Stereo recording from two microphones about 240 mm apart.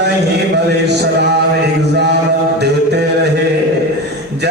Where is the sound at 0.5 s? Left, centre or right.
Right.